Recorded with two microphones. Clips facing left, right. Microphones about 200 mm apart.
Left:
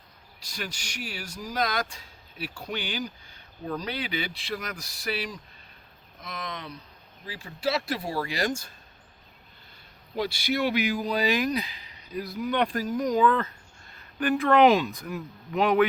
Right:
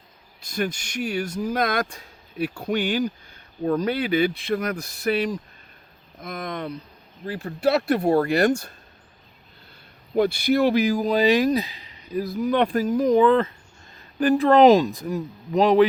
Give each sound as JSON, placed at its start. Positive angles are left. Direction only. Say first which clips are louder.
{"t": 0.5, "sound": "speech", "louder": "right 11 dB", "side_deg": -55}
{"t": 10.2, "sound": "speech", "louder": "right 8 dB", "side_deg": -55}
{"t": 12.3, "sound": "speech", "louder": "right 5 dB", "side_deg": -40}
{"t": 13.0, "sound": "speech", "louder": "right 6 dB", "side_deg": -30}